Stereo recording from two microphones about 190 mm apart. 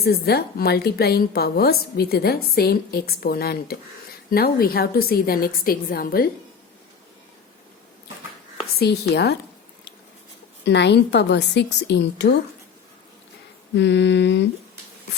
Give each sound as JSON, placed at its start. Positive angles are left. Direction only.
{"t": 0.0, "sound": "a woman's voice", "side_deg": 55}
{"t": 8.8, "sound": "a woman's voice", "side_deg": 60}
{"t": 10.7, "sound": "a woman's voice", "side_deg": 65}
{"t": 13.7, "sound": "mantra", "side_deg": 65}